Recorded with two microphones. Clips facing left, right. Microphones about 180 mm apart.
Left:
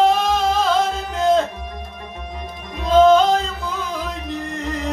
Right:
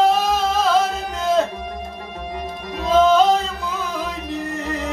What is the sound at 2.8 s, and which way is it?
Music, 5° right (ahead or behind).